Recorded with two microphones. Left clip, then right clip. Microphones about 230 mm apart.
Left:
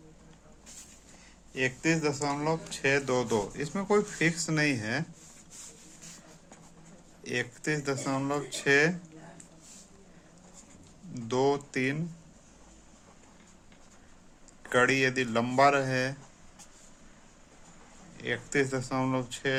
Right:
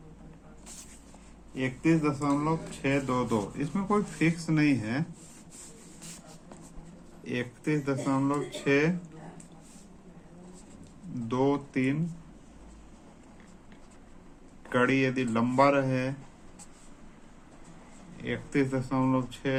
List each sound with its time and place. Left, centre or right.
1.5 s speech: left
7.3 s speech: left
11.3 s speech: left
14.7 s speech: left
18.2 s speech: left